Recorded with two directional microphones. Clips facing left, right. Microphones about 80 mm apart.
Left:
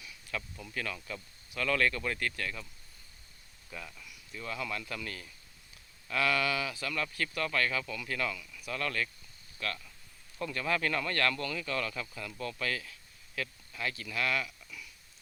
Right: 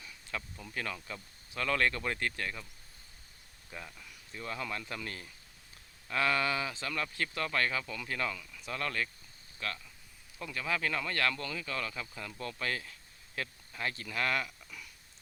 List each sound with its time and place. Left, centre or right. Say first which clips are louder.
0.0 s a sound: left 1 dB; right
0.7 s speech: left 1 dB; right
3.7 s speech: left 1 dB; right
12.2 s speech: left 1 dB; right